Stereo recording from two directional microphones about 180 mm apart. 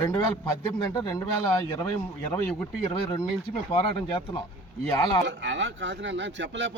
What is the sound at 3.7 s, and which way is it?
Speech, 30° left (ahead or behind).